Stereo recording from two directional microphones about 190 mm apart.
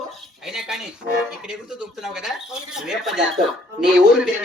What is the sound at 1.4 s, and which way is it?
Speech, 5° right (ahead or behind).